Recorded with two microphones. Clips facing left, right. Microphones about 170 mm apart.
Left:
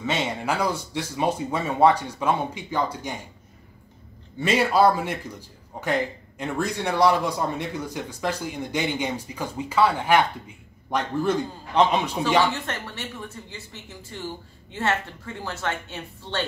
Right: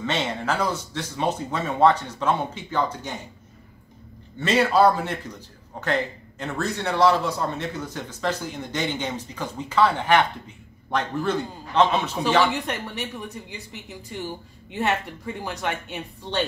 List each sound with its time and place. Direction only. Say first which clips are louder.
0.0 s a man's voice: even; 10° left (ahead or behind)
4.4 s a man's voice: right 1 dB; 10° left (ahead or behind)
12.6 s speech: right 3 dB; 15° right (ahead or behind)